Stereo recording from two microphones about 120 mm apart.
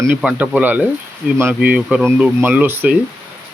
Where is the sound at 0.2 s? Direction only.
5° right (ahead or behind).